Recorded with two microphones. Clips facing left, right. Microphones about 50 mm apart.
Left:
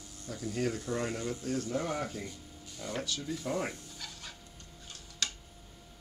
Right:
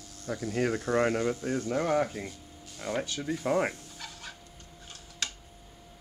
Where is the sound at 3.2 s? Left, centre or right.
Right.